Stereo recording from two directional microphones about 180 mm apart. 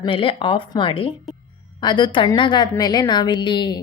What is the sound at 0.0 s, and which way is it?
A woman's voice, 30° left (ahead or behind).